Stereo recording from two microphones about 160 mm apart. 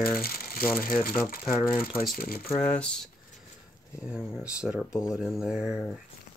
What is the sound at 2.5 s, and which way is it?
Speech, 5° left (ahead or behind).